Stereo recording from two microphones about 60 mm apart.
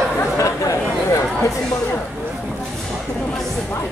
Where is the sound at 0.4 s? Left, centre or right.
Left.